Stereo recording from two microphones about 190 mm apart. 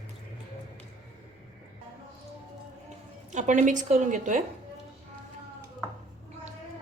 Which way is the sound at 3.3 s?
40° right (ahead or behind).